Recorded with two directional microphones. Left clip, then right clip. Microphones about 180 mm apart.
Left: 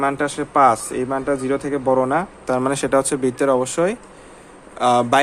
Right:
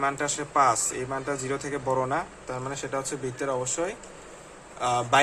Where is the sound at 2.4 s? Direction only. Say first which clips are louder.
Left 13 dB; 55° left (ahead or behind).